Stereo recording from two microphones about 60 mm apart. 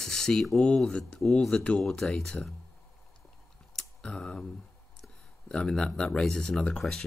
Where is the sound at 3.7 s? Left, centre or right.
Centre.